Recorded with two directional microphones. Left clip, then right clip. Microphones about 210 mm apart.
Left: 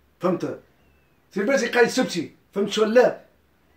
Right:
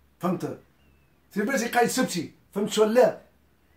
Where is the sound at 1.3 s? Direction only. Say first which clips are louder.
Left 4 dB; 15° right (ahead or behind).